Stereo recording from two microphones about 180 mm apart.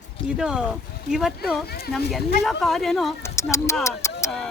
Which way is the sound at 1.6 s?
60° left (ahead or behind).